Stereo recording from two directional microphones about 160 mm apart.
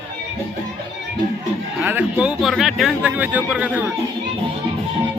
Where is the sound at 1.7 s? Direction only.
10° right (ahead or behind).